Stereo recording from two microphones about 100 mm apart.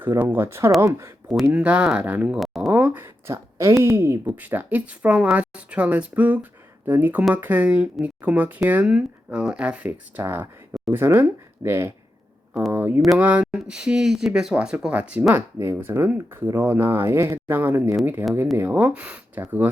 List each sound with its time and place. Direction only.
0.0 s speech: 20° right (ahead or behind)
1.5 s a woman's voice: 15° right (ahead or behind)
2.6 s a sound: 15° right (ahead or behind)
4.3 s a woman's voice: 15° right (ahead or behind)
15.3 s a woman's voice: 25° right (ahead or behind)